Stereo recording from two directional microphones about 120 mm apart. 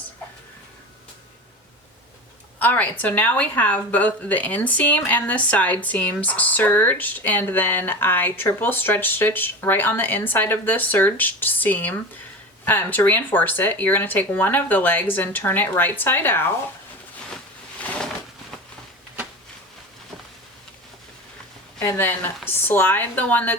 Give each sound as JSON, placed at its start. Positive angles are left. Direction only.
{"t": 2.6, "sound": "speech", "side_deg": 15}
{"t": 17.7, "sound": "a sound", "side_deg": 10}
{"t": 21.8, "sound": "speech", "side_deg": 15}